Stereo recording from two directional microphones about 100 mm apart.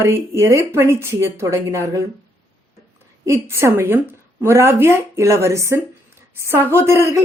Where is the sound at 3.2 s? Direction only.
30° right (ahead or behind).